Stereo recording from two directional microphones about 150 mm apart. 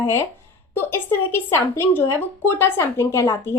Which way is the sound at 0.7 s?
15° left (ahead or behind).